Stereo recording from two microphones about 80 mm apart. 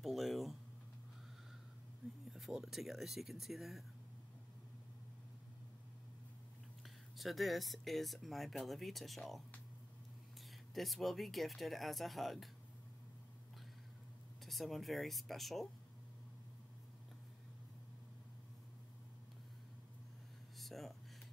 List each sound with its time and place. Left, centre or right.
0.0 s a sound: centre
2.3 s speech: centre
7.2 s speech: centre
10.7 s speech: centre
14.4 s speech: centre
20.5 s a sound: centre